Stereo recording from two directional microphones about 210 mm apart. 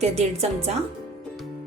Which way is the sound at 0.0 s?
30° right (ahead or behind).